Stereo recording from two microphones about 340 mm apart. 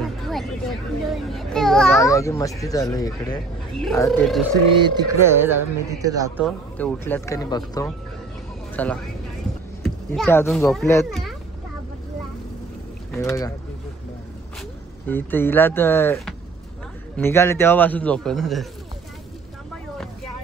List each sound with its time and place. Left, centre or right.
0.0 s a child's voice: centre
5.1 s speech: centre
6.8 s a child's voice: centre
13.1 s a child's voice: centre
15.0 s a child's voice: centre